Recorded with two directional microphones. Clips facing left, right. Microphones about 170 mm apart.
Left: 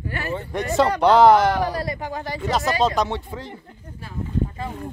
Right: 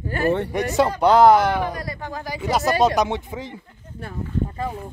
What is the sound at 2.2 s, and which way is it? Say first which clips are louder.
Speech: right 2 dB; 10° right (ahead or behind).